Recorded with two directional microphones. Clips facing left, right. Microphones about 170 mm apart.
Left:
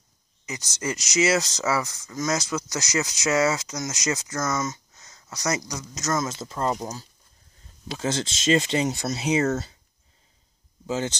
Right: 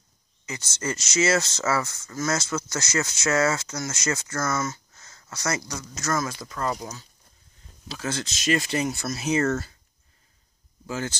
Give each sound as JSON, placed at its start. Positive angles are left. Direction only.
{"t": 0.5, "sound": "speech", "side_deg": 15}
{"t": 10.9, "sound": "speech", "side_deg": 20}